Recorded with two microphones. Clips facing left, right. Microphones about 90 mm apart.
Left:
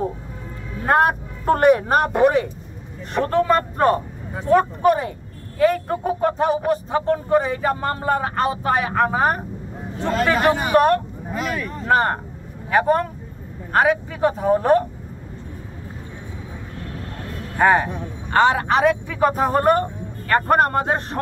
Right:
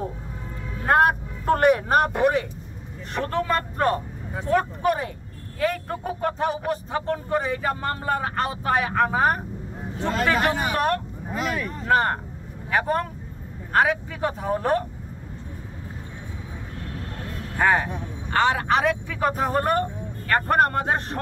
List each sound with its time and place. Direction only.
1.5 s speech: 35° left (ahead or behind)
4.5 s a man's voice: 25° left (ahead or behind)
10.5 s speech: 5° left (ahead or behind)
11.3 s speech: 20° right (ahead or behind)
11.9 s a man's voice: 20° left (ahead or behind)
17.6 s a man's voice: 20° left (ahead or behind)